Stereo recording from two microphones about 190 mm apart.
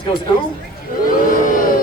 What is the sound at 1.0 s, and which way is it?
Crowd, 45° left (ahead or behind).